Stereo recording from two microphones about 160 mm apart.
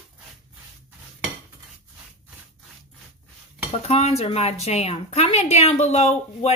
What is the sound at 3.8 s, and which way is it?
A woman's voice, 40° left (ahead or behind).